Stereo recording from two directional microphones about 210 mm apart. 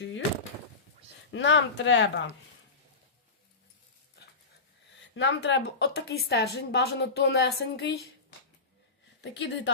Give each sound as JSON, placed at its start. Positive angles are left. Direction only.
{"t": 1.3, "sound": "speech", "side_deg": 60}
{"t": 4.2, "sound": "dog", "side_deg": 55}
{"t": 5.1, "sound": "a woman's voice", "side_deg": 55}
{"t": 9.2, "sound": "speech", "side_deg": 55}